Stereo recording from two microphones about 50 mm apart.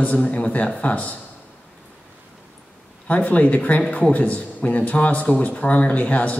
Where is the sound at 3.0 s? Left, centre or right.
Left.